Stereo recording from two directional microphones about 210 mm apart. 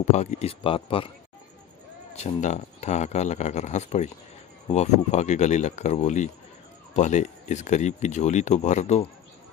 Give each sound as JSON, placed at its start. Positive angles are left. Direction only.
{"t": 0.0, "sound": "a man's voice", "side_deg": 35}
{"t": 2.2, "sound": "speech", "side_deg": 35}